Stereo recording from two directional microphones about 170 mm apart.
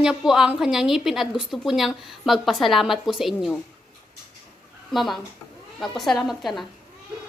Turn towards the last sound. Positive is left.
turn(degrees=0)  # may be behind; listen again after turning